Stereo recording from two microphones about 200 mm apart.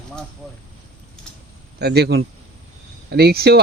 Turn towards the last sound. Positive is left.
turn(degrees=-50)  # may be behind; listen again after turning